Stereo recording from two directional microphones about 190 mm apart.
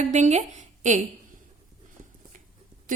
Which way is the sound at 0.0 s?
40° right (ahead or behind).